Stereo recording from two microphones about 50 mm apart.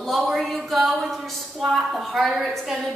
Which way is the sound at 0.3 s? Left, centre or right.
Centre.